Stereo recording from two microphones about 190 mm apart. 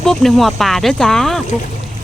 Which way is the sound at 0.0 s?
Centre (ahead or behind).